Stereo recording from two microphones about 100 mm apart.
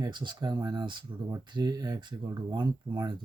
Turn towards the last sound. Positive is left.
turn(degrees=-50)  # may be behind; listen again after turning